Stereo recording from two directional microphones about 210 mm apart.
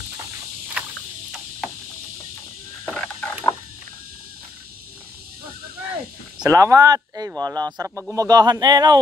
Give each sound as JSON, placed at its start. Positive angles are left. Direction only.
{"t": 2.9, "sound": "a sound", "side_deg": 10}
{"t": 6.4, "sound": "speech", "side_deg": -15}
{"t": 7.7, "sound": "speech", "side_deg": -5}